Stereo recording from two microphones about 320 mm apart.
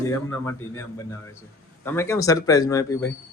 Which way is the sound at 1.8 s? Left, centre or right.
Centre.